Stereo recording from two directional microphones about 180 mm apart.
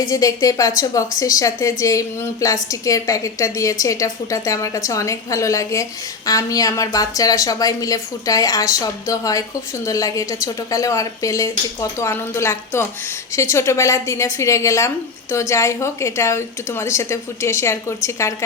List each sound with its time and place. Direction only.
0.0 s a woman's voice: 20° left (ahead or behind)